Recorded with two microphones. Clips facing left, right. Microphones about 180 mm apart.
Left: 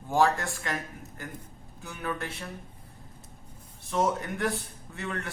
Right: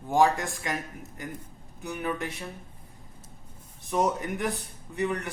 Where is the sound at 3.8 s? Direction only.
15° right (ahead or behind).